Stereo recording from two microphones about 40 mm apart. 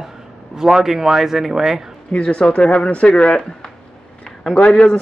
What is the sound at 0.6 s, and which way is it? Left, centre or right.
A man's voice, centre.